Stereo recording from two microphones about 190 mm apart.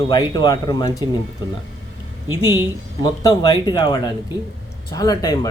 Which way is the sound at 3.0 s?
20° left (ahead or behind).